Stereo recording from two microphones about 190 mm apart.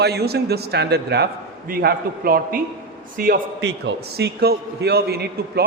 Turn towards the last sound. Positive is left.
turn(degrees=-55)  # may be behind; listen again after turning